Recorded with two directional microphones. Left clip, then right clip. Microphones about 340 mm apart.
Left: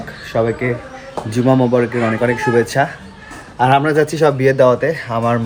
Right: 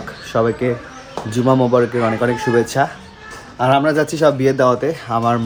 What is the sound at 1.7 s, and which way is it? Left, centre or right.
Speech, right.